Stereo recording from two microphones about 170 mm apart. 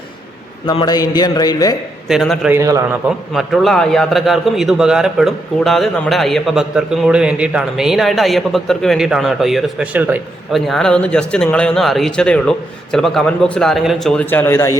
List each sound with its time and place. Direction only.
0.7 s a sound: 25° left (ahead or behind)
2.0 s a man's voice: centre (ahead or behind)
2.5 s a man's voice: 20° right (ahead or behind)
3.3 s a man's voice: centre (ahead or behind)
10.7 s a man's voice: 5° left (ahead or behind)